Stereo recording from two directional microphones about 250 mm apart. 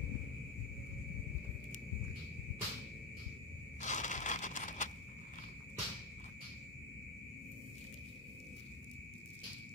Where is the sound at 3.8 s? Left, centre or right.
Left.